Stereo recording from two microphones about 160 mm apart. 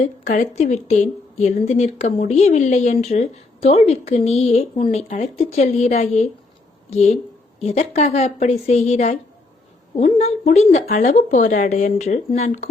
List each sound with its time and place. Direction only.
0.5 s speech: 45° left (ahead or behind)